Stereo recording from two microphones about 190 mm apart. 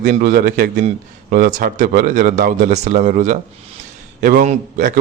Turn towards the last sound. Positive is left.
turn(degrees=-45)  # may be behind; listen again after turning